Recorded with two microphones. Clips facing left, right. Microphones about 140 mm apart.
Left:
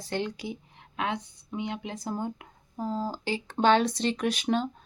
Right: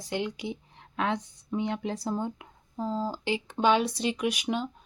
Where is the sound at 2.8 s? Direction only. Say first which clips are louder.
Even; 15° left (ahead or behind).